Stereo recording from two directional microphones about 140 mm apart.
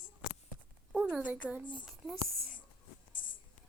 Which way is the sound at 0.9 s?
10° right (ahead or behind).